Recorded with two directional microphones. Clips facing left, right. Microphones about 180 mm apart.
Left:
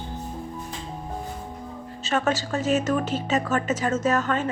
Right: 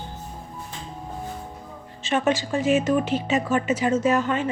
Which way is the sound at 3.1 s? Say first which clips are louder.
Right 2 dB; 10° right (ahead or behind).